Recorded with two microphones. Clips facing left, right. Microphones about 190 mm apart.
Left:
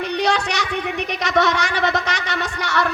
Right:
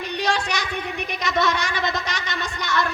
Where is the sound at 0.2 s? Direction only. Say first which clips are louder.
Left 2 dB; 70° left (ahead or behind).